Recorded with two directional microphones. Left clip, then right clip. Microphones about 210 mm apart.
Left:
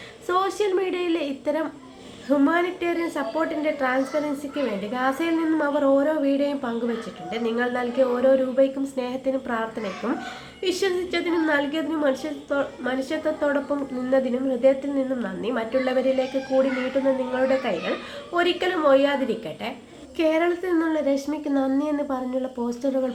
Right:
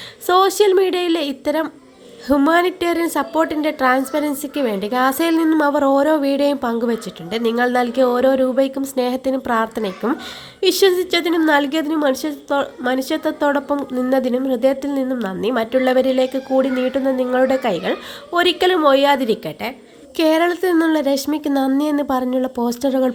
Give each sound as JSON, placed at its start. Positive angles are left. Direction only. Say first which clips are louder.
{"t": 0.3, "sound": "a woman's voice", "louder": "right 9 dB", "side_deg": -45}